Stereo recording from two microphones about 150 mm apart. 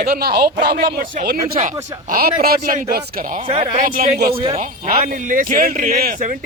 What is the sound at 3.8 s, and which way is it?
Speech, 60° right (ahead or behind).